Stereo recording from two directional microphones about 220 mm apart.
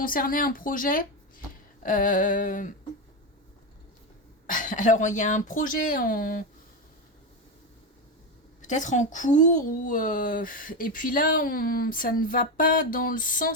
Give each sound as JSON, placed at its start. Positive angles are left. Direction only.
{"t": 0.0, "sound": "a woman's voice", "side_deg": 40}
{"t": 4.4, "sound": "a woman's voice", "side_deg": 35}
{"t": 8.6, "sound": "a woman's voice", "side_deg": 35}